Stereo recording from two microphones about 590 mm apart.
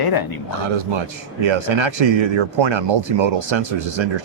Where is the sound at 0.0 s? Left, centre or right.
Left.